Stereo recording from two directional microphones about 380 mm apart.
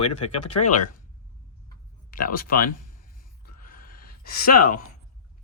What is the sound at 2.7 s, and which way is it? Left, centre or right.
Speech, left.